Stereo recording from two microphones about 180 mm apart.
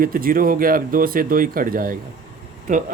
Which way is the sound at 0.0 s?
50° right (ahead or behind).